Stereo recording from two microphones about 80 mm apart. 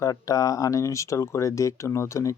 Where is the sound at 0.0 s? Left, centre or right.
Left.